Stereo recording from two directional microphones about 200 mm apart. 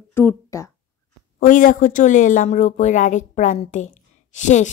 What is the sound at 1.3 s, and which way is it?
Speech, 40° left (ahead or behind).